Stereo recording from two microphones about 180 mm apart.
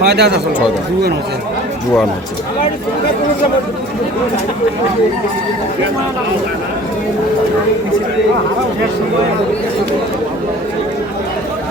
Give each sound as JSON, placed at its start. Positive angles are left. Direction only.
{"t": 0.0, "sound": "speech", "side_deg": -65}